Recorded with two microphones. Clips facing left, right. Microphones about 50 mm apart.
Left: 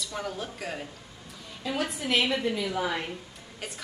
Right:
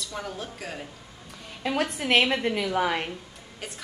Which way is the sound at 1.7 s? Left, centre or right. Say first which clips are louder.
Right 4 dB; right.